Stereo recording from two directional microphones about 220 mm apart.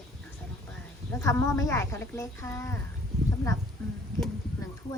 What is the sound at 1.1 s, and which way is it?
Speech, 15° left (ahead or behind).